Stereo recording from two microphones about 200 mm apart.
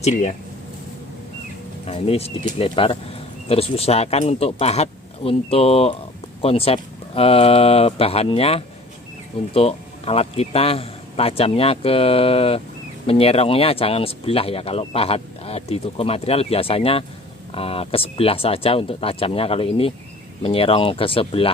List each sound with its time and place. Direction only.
0.0 s speech: 35° left (ahead or behind)
1.9 s a man's voice: 30° left (ahead or behind)